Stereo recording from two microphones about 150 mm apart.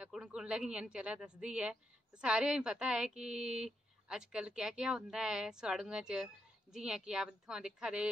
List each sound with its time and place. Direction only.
0.0 s a woman's voice: 5° right (ahead or behind)